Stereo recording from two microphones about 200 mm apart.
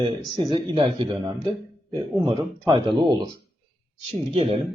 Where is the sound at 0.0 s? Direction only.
25° right (ahead or behind).